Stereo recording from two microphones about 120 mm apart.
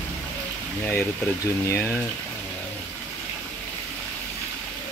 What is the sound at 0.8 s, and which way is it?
Speech, 20° left (ahead or behind).